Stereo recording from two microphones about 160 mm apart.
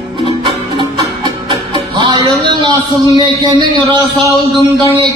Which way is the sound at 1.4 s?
30° right (ahead or behind).